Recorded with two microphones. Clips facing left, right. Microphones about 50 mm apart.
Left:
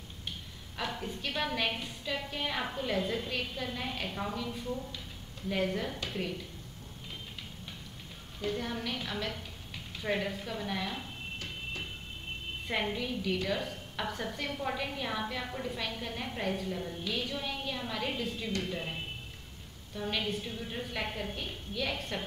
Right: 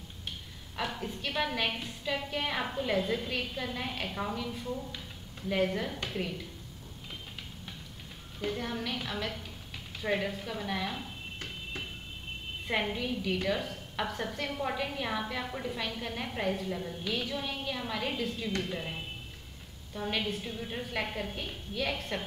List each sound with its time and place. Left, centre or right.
0.7 s a woman's voice: centre
5.5 s a woman's voice: centre
8.5 s a woman's voice: centre
12.6 s a woman's voice: centre
19.9 s a woman's voice: centre